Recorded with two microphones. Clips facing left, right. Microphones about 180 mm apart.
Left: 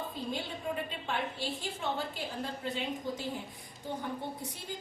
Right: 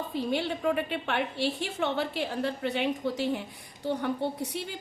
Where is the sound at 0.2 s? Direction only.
75° right (ahead or behind).